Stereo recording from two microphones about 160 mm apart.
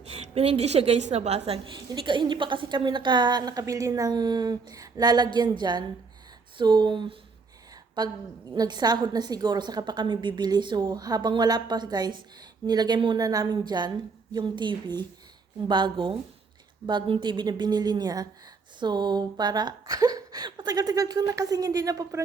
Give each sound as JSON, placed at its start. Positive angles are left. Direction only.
{"t": 0.0, "sound": "a woman's voice", "side_deg": -40}